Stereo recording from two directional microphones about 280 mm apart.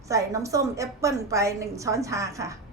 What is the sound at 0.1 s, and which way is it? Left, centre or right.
A woman's voice, centre.